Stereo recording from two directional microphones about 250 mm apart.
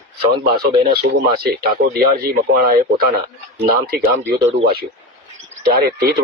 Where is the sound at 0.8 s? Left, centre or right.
Right.